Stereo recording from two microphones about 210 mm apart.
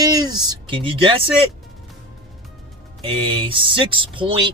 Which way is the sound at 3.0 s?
25° right (ahead or behind).